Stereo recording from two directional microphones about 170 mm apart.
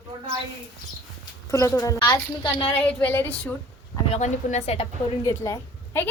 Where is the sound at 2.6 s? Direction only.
10° left (ahead or behind).